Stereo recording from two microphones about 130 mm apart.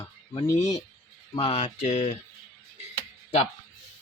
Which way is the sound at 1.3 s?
40° left (ahead or behind).